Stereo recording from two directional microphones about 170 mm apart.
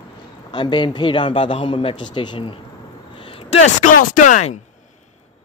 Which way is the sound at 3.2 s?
35° left (ahead or behind).